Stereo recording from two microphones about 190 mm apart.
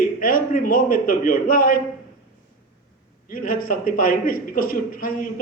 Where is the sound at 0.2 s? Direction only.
45° left (ahead or behind).